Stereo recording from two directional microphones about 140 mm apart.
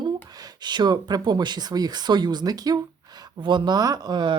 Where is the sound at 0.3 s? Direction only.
30° right (ahead or behind).